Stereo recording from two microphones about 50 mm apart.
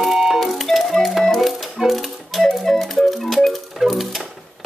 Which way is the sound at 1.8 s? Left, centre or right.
Centre.